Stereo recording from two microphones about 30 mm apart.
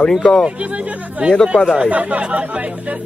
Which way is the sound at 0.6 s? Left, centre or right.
Right.